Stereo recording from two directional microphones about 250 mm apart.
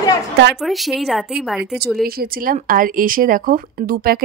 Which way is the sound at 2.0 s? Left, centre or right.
Right.